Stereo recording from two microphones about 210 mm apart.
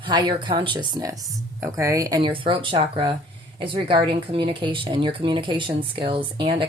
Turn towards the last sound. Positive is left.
turn(degrees=-25)  # may be behind; listen again after turning